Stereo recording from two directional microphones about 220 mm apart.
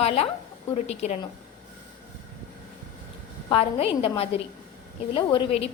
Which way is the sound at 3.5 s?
25° left (ahead or behind).